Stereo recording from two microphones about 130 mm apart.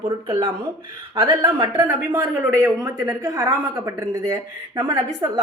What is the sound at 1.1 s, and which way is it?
Speech, 30° right (ahead or behind).